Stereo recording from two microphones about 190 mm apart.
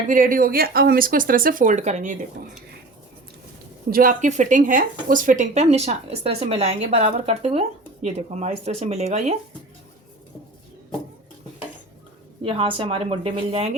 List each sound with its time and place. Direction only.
0.1 s speech: 45° right (ahead or behind)
3.8 s speech: 45° right (ahead or behind)
12.5 s a woman's voice: 30° right (ahead or behind)